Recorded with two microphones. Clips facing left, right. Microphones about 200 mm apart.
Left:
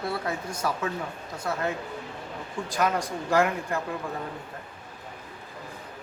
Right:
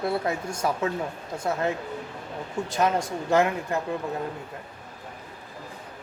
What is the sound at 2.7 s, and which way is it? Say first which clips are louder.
A woman's voice: right 2 dB; 25° right (ahead or behind).